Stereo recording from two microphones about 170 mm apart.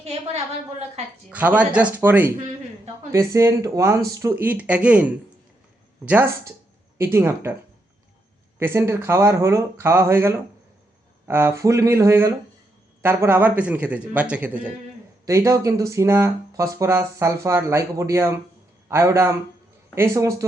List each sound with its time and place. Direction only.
0.0 s a woman's voice: 35° right (ahead or behind)
1.3 s speech: 10° right (ahead or behind)
8.5 s speech: 15° right (ahead or behind)